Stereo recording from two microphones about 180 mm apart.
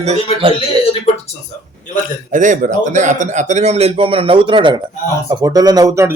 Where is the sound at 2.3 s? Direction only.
45° right (ahead or behind).